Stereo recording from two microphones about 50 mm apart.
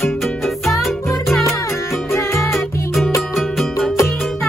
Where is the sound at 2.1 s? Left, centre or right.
Left.